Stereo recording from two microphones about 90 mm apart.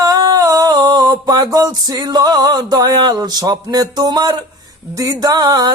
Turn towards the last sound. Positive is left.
turn(degrees=-50)  # may be behind; listen again after turning